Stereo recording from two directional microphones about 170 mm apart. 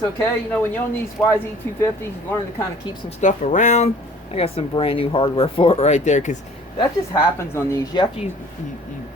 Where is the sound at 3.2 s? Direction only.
45° left (ahead or behind).